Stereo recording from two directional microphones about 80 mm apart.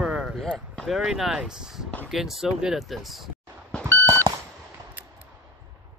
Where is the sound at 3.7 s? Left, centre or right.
Centre.